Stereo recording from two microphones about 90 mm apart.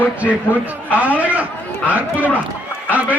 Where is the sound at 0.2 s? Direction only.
15° right (ahead or behind).